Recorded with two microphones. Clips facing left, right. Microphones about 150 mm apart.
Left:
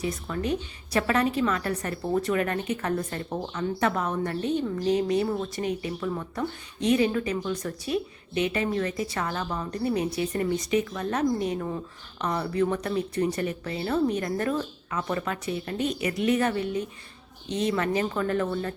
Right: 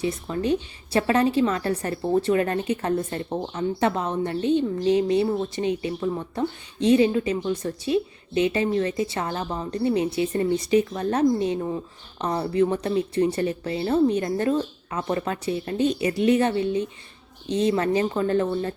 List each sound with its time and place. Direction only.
0.0 s a woman's voice: 25° right (ahead or behind)